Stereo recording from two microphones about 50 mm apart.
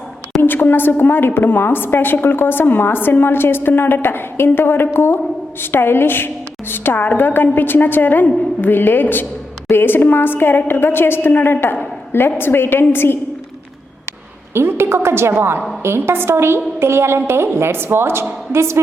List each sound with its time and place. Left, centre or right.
0.4 s a woman's voice: left
14.5 s a woman's voice: right
18.5 s a woman's voice: right